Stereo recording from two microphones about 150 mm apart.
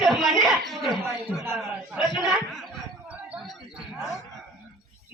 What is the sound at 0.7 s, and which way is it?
Speech, centre (ahead or behind).